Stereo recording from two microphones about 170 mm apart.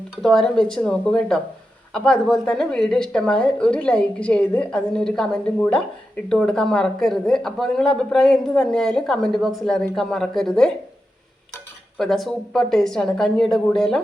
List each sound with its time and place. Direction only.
0.2 s speech: centre (ahead or behind)
11.9 s speech: centre (ahead or behind)